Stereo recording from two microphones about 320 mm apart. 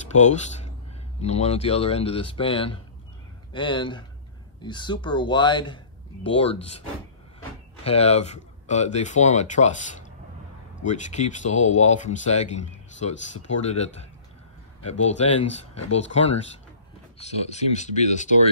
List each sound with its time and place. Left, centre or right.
0.1 s speech: left
7.8 s speech: centre